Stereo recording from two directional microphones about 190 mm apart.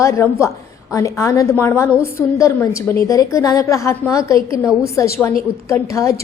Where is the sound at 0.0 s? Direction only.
15° left (ahead or behind).